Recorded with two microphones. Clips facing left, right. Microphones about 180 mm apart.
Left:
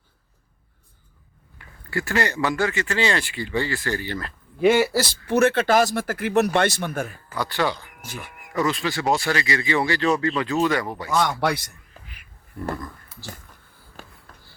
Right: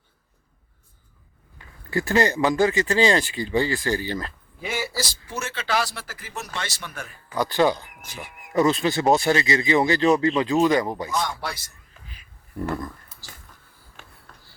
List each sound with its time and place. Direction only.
1.9 s speech: 20° right (ahead or behind)
2.6 s speech: 35° right (ahead or behind)
3.5 s speech: 15° right (ahead or behind)
3.9 s speech: 35° right (ahead or behind)
4.6 s speech: 70° left (ahead or behind); by 7.1 s 50° left (ahead or behind)
7.3 s speech: 20° right (ahead or behind)
11.2 s a man's voice: 70° left (ahead or behind)
14.0 s writing: 40° left (ahead or behind)